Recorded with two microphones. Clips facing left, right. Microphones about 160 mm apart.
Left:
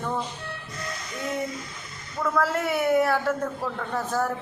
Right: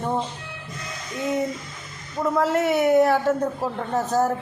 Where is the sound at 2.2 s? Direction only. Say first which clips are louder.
Right 4 dB; 20° right (ahead or behind).